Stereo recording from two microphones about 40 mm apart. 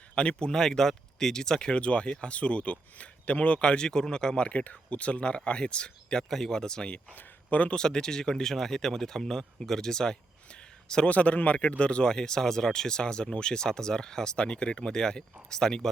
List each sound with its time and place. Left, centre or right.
0.2 s speech: left
3.8 s speech: centre
4.4 s speech: left
6.3 s speech: centre
7.2 s a sound: left
7.7 s speech: centre
11.1 s speech: left; by 15.9 s centre